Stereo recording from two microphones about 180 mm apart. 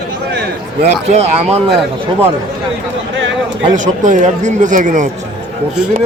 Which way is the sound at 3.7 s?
45° right (ahead or behind).